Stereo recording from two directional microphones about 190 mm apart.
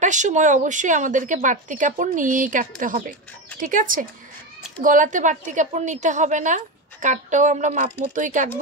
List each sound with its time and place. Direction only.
0.0 s a woman's voice: 40° right (ahead or behind)